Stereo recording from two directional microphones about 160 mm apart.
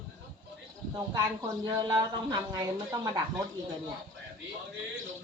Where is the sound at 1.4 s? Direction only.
25° right (ahead or behind).